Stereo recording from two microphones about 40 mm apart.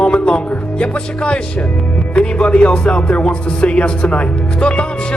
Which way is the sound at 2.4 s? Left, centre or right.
Left.